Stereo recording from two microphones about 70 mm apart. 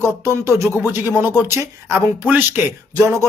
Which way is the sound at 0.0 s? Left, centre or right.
Right.